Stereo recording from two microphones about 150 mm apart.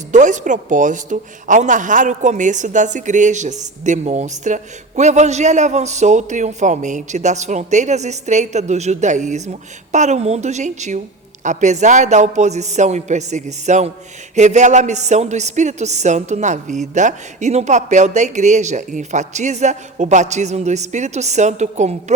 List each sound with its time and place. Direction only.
0.1 s a woman's voice: 55° right (ahead or behind)